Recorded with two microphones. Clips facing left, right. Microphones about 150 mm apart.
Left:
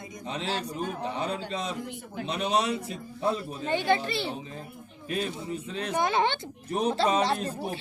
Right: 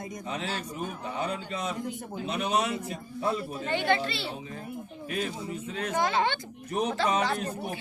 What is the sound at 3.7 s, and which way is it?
Speech, 20° left (ahead or behind).